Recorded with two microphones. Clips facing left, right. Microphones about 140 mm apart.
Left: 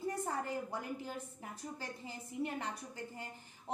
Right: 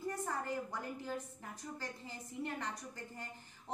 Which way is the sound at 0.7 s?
15° left (ahead or behind).